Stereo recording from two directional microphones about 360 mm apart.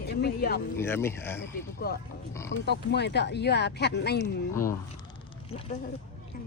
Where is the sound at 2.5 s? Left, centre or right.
Left.